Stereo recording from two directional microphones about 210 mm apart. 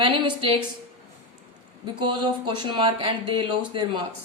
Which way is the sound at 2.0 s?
20° right (ahead or behind).